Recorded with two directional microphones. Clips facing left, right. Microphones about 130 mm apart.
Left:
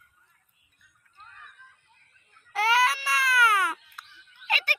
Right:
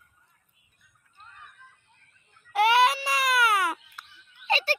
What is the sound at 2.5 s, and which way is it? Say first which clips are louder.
Baby cry: right 3 dB; 20° right (ahead or behind).